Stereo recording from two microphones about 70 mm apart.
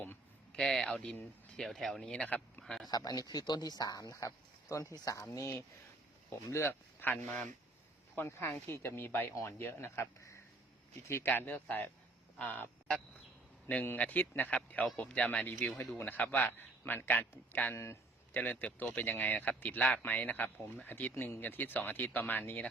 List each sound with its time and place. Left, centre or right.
0.5 s speech: centre
2.2 s speech: left
2.6 s speech: centre
2.9 s speech: left
6.5 s speech: left
7.0 s speech: left
9.3 s speech: left
9.6 s speech: left
11.1 s speech: left
13.7 s speech: left